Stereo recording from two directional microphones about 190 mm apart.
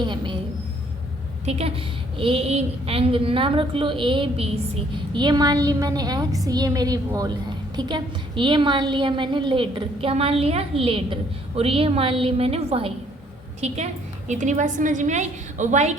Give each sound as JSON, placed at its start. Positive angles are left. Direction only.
{"t": 0.0, "sound": "a woman's voice", "side_deg": -25}
{"t": 1.5, "sound": "a woman's voice", "side_deg": -30}